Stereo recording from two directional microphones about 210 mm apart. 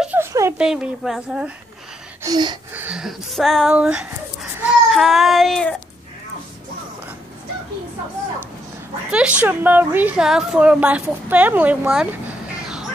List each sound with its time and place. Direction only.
0.0 s a sound: 10° right (ahead or behind)
0.6 s a woman's voice: 5° right (ahead or behind)
2.2 s gasp: 20° right (ahead or behind)
2.7 s speech: 5° right (ahead or behind)
9.1 s a woman's voice: 5° right (ahead or behind)